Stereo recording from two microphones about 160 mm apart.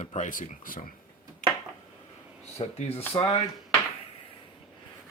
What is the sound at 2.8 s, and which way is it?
Speech, 40° left (ahead or behind).